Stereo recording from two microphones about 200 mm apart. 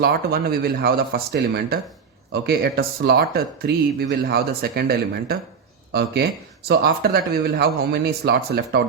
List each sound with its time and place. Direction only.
0.0 s speech: 50° right (ahead or behind)